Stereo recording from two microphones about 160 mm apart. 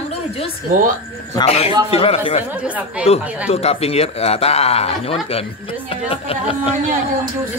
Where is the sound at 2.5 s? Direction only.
10° right (ahead or behind).